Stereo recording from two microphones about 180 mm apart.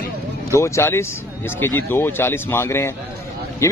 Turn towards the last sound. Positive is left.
turn(degrees=15)  # may be behind; listen again after turning